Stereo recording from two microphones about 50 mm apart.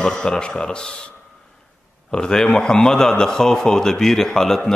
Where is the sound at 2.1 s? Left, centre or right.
Centre.